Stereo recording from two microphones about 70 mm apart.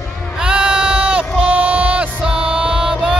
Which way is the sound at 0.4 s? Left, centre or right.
Centre.